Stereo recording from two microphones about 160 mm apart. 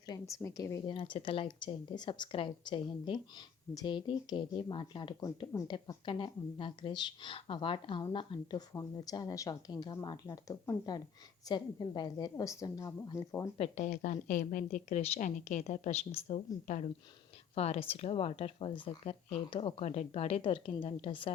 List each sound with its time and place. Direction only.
0.1 s a woman's voice: 20° left (ahead or behind)
0.9 s a woman's voice: 30° left (ahead or behind)
13.6 s a woman's voice: 45° left (ahead or behind)
16.6 s a woman's voice: 50° left (ahead or behind)
17.5 s speech: 40° left (ahead or behind)